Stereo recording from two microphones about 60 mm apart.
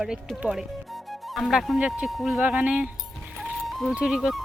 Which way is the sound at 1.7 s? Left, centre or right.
Right.